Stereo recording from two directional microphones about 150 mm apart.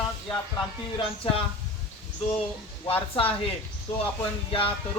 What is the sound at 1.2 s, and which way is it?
Speech, 35° left (ahead or behind).